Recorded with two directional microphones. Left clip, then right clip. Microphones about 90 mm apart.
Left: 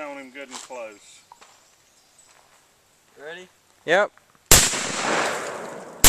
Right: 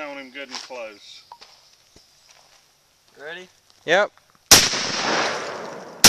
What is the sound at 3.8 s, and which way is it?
Speech, centre (ahead or behind).